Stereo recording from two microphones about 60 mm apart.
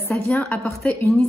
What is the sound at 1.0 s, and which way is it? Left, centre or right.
Speech, left.